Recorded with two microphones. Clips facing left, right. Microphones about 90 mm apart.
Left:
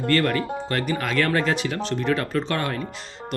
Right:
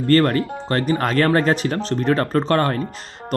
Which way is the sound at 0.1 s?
40° right (ahead or behind).